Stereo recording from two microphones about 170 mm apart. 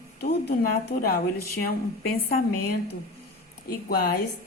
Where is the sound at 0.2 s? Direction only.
70° left (ahead or behind).